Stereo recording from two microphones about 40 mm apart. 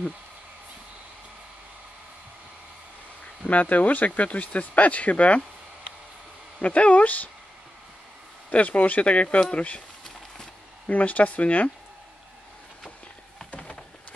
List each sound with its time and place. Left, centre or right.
3.4 s speech: left
6.6 s speech: left
8.5 s speech: left
10.0 s horse: centre
10.9 s speech: left
13.6 s a sound: left